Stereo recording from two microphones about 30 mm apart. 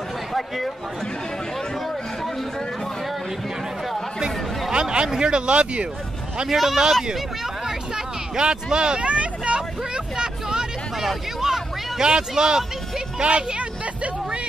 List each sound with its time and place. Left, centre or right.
0.3 s speech: centre
4.7 s a man's voice: right
6.5 s speech: centre
7.6 s a sound: right
8.7 s speech: right
9.0 s speech: right
13.2 s a man's voice: right